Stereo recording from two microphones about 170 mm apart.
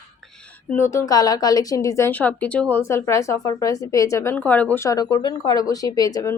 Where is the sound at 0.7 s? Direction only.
15° left (ahead or behind).